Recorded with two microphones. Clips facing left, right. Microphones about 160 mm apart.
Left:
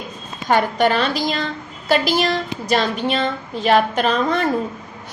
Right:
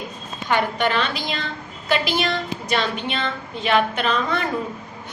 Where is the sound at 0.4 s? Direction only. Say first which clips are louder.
Left 4 dB; 40° left (ahead or behind).